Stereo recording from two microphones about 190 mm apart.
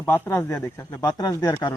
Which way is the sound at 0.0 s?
10° left (ahead or behind).